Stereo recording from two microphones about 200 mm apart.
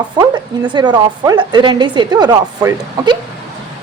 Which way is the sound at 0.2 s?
25° right (ahead or behind).